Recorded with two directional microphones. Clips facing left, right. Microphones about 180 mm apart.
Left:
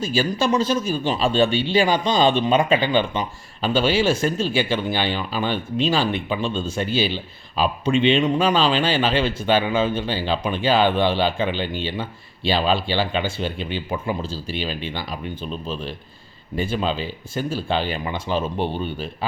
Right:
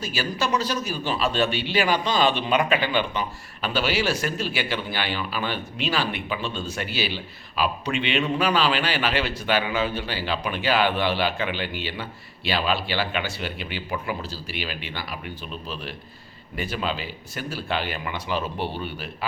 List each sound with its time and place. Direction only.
0.0 s speech: 30° left (ahead or behind)
16.6 s speech: 25° left (ahead or behind)